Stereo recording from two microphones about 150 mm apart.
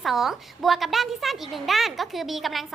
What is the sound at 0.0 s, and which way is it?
A woman's voice, centre (ahead or behind).